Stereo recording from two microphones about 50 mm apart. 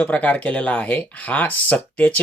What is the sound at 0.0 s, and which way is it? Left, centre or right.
Speech, left.